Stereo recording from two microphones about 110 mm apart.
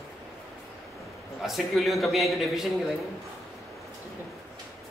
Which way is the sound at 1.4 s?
Centre (ahead or behind).